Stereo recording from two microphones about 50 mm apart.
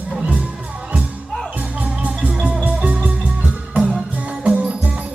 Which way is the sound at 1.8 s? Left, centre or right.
Right.